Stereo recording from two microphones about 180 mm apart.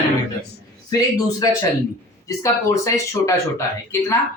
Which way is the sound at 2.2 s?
20° left (ahead or behind).